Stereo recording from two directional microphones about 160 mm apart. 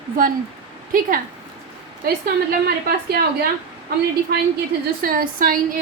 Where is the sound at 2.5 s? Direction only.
75° right (ahead or behind).